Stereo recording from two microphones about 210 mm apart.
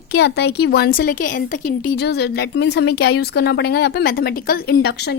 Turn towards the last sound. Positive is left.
turn(degrees=50)  # may be behind; listen again after turning